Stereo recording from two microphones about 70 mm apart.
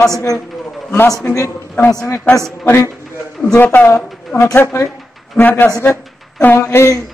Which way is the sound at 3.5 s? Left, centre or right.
Left.